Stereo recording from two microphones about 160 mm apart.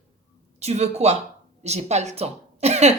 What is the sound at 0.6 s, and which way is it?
Speech, 40° right (ahead or behind).